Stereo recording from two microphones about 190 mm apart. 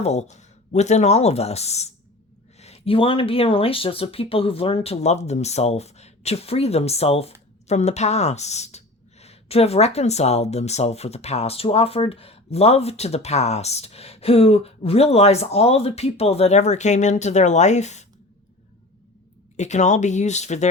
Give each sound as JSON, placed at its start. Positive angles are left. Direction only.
{"t": 0.0, "sound": "speech", "side_deg": 35}
{"t": 19.5, "sound": "speech", "side_deg": 40}